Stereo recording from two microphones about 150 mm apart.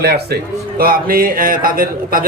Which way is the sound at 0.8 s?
80° right.